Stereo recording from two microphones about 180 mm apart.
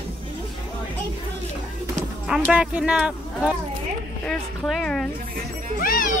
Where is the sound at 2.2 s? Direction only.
5° right (ahead or behind).